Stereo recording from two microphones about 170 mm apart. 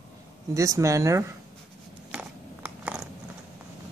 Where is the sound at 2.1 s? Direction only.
10° right (ahead or behind).